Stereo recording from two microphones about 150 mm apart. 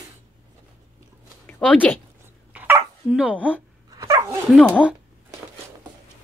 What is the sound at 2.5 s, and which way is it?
Dog, 10° right (ahead or behind).